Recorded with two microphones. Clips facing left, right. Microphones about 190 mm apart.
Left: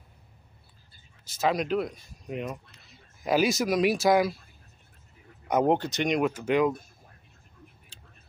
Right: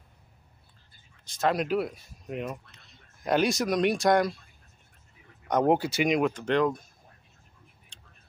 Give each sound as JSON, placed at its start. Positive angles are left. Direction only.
{"t": 1.2, "sound": "speech", "side_deg": 5}
{"t": 5.7, "sound": "speech", "side_deg": -10}